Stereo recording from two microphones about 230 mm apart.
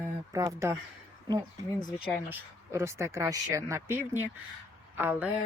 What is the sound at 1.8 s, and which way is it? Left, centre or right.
Speech, centre.